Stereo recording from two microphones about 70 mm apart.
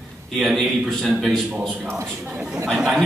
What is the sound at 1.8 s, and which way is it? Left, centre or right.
Speech, right.